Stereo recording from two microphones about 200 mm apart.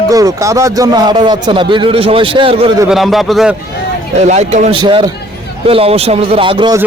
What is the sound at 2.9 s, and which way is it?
Speech, centre (ahead or behind).